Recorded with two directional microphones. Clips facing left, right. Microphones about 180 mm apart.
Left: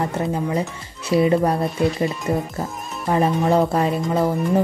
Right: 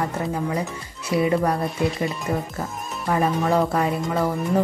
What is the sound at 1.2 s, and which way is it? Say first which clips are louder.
Speech: left 3 dB; 25° left (ahead or behind).